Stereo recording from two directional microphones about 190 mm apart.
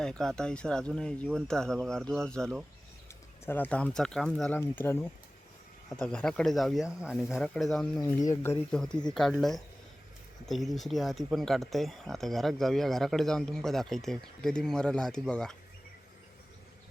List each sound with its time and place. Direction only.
0.0 s speech: 5° left (ahead or behind)
8.1 s speech: 15° left (ahead or behind)
8.7 s speech: 5° left (ahead or behind)